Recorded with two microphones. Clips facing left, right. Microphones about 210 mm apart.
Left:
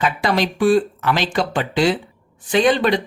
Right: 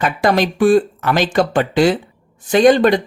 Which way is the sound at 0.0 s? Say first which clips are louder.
Right 4 dB; 50° right (ahead or behind).